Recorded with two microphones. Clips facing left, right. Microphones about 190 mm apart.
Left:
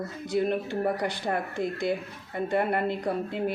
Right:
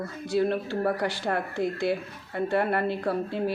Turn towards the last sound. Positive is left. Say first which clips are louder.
# right 1 dB
turn(degrees=20)  # may be behind; listen again after turning